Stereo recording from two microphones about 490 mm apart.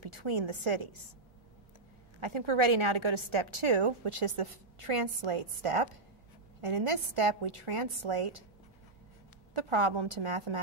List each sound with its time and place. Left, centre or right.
0.0 s a woman's voice: right
2.1 s a woman's voice: right
9.5 s a woman's voice: right